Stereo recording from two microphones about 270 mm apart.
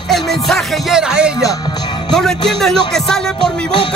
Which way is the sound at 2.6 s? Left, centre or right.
Centre.